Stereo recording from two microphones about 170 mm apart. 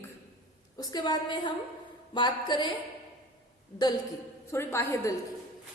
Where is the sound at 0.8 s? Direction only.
25° left (ahead or behind).